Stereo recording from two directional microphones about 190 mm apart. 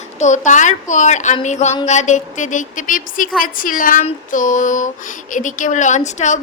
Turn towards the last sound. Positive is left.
turn(degrees=40)  # may be behind; listen again after turning